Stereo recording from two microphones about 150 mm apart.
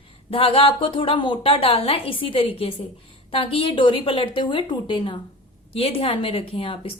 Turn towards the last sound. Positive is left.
turn(degrees=40)  # may be behind; listen again after turning